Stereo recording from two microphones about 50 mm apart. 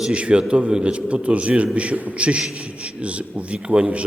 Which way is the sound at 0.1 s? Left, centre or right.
Right.